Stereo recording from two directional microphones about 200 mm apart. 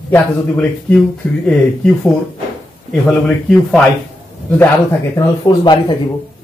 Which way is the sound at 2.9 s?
5° left (ahead or behind).